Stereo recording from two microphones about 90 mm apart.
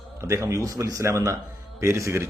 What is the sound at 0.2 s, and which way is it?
A man's voice, 35° right (ahead or behind).